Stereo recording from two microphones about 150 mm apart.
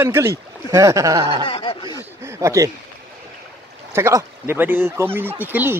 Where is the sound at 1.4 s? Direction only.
35° left (ahead or behind).